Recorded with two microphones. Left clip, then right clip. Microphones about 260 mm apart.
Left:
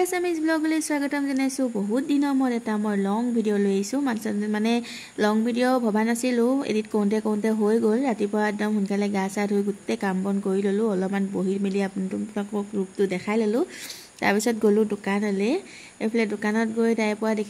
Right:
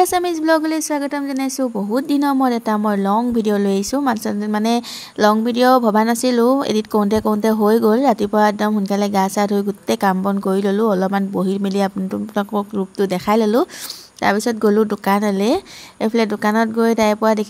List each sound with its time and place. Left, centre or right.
0.0 s a woman's voice: right
14.2 s a woman's voice: centre